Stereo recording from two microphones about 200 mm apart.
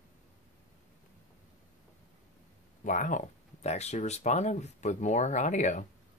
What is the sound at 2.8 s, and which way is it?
Speech, 40° left (ahead or behind).